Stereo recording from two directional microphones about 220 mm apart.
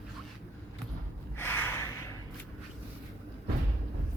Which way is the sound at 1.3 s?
10° left (ahead or behind).